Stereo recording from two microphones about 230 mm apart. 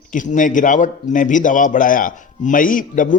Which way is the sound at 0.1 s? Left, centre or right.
Left.